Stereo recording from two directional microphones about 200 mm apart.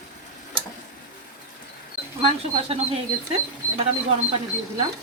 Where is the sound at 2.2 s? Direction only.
30° right (ahead or behind).